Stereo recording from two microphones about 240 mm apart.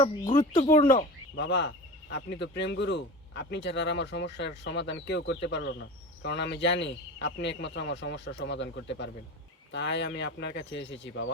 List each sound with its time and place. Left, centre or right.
0.5 s speech: left
1.4 s speech: left